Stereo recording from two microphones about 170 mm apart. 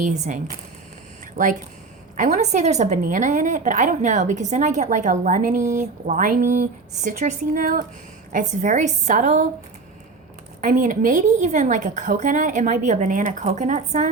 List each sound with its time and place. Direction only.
0.0 s a woman's voice: 50° right (ahead or behind)
10.6 s a woman's voice: 50° right (ahead or behind)